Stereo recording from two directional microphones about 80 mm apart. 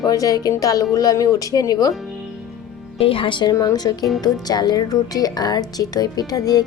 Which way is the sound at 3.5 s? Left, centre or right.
Left.